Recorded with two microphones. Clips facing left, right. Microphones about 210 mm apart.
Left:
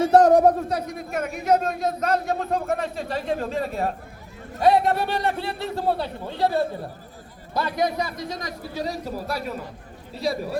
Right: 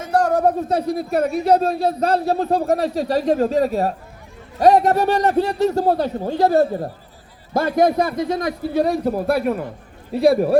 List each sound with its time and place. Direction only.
0.0 s speech: 20° left (ahead or behind)
0.7 s a man's voice: 30° right (ahead or behind); by 10.6 s 60° right (ahead or behind)